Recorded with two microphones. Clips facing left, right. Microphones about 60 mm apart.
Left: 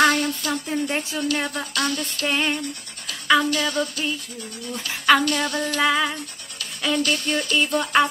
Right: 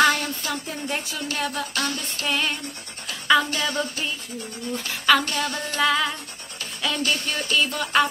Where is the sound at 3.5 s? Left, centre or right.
Right.